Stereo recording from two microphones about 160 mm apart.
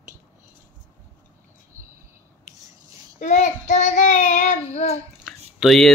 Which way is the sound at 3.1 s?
45° left (ahead or behind).